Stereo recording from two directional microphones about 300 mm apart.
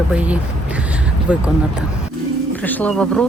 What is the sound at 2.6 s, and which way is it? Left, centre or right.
Speech, centre.